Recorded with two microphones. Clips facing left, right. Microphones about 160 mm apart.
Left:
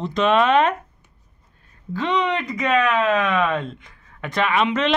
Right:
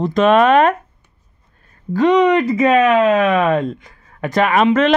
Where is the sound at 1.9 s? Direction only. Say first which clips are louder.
Right 10 dB; 45° right (ahead or behind).